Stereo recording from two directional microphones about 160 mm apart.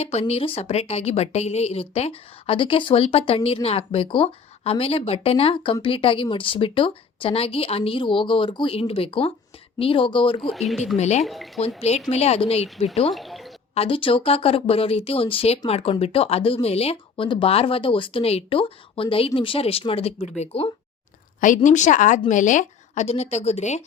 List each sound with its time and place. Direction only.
0.0 s speech: 40° left (ahead or behind)
10.4 s speech: centre (ahead or behind)
10.9 s a woman's voice: 45° left (ahead or behind)
11.3 s speech: centre (ahead or behind)
11.8 s speech: 40° left (ahead or behind)
13.1 s a sound: centre (ahead or behind)
13.7 s a woman's voice: 35° left (ahead or behind)
21.4 s a woman's voice: 50° left (ahead or behind)